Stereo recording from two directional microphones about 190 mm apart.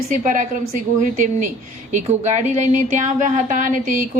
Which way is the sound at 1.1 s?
40° right (ahead or behind).